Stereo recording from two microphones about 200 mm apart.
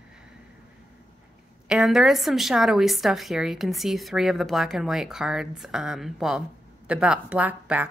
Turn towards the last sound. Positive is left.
turn(degrees=-5)  # may be behind; listen again after turning